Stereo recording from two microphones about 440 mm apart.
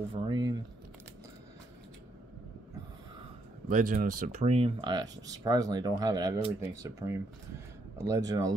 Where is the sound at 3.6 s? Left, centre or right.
Centre.